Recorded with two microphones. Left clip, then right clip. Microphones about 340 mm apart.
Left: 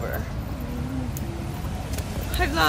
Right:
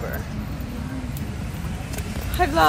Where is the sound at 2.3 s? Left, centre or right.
Centre.